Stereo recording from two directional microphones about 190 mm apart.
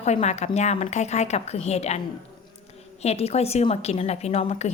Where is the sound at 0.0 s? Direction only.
35° left (ahead or behind).